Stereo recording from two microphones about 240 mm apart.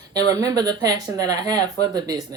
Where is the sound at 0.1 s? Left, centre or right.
Centre.